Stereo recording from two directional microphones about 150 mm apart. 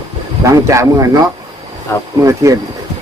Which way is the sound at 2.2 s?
20° right (ahead or behind).